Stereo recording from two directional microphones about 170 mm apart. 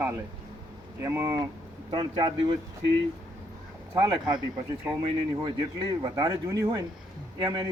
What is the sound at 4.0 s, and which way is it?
Speech, 25° right (ahead or behind).